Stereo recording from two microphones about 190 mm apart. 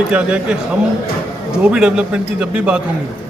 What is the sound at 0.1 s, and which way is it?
Speech, 5° right (ahead or behind).